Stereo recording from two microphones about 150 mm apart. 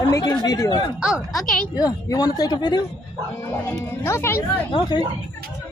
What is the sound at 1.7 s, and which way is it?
Speech, 25° left (ahead or behind).